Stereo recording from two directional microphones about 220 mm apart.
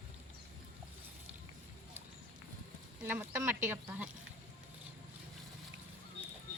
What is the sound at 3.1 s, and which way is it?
Speech, 10° right (ahead or behind).